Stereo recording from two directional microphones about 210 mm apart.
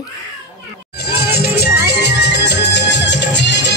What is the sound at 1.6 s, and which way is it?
Music, 50° left (ahead or behind).